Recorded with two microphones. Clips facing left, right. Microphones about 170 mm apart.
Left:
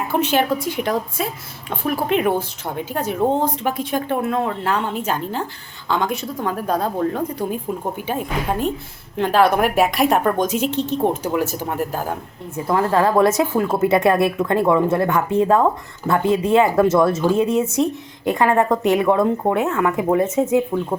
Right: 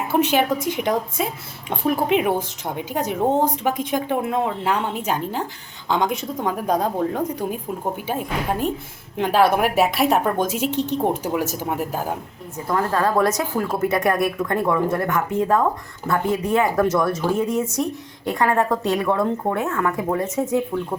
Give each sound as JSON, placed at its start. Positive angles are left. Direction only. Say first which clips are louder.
{"t": 0.1, "sound": "speech", "louder": "even", "side_deg": -10}
{"t": 2.0, "sound": "speech", "louder": "left 1 dB", "side_deg": -10}
{"t": 9.1, "sound": "speech", "louder": "left 1 dB", "side_deg": -10}
{"t": 12.6, "sound": "a woman's voice", "louder": "left 3 dB", "side_deg": 20}